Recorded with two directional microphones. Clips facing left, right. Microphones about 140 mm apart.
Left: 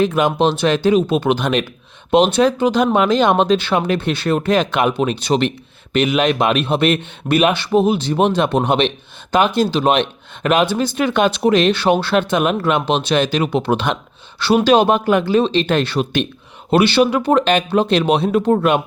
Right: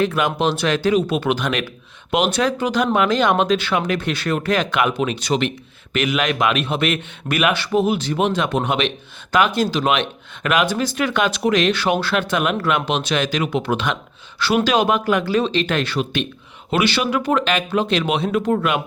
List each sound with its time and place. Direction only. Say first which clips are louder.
0.0 s speech: left 4 dB; 20° left (ahead or behind)